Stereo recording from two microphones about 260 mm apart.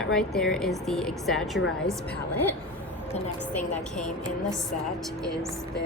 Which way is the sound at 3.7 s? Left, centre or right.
Centre.